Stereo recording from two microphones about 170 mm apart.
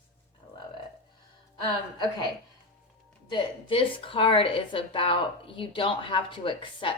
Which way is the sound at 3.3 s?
30° left (ahead or behind).